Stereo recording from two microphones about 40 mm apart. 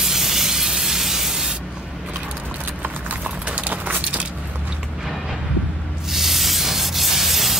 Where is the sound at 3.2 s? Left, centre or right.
Right.